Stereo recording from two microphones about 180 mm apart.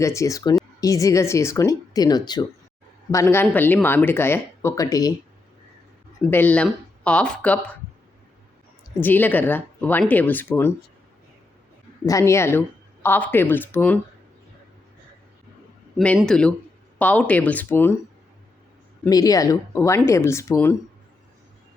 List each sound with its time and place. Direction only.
0.0 s speech: 15° left (ahead or behind)
6.2 s speech: 10° left (ahead or behind)
9.0 s speech: 10° left (ahead or behind)
12.0 s speech: 15° left (ahead or behind)
16.0 s speech: centre (ahead or behind)
19.0 s speech: 20° left (ahead or behind)